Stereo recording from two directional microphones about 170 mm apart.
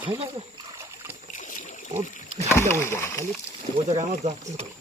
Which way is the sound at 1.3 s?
50° left (ahead or behind).